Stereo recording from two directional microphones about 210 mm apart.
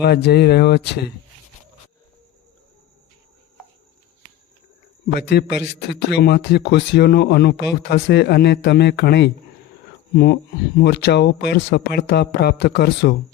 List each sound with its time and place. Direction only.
0.0 s speech: 50° left (ahead or behind)
5.1 s speech: 50° left (ahead or behind)